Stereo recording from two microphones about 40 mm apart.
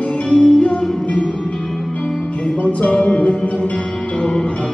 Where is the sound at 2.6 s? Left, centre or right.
Left.